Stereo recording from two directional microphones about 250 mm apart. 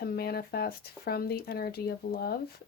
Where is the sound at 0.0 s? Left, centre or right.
Left.